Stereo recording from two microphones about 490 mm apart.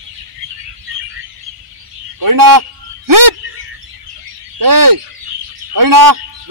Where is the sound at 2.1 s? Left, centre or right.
Right.